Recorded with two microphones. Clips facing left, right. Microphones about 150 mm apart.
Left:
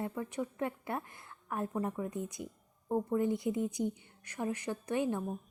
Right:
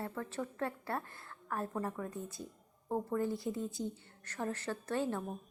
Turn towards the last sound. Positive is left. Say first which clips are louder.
# left 3 dB
turn(degrees=10)  # may be behind; listen again after turning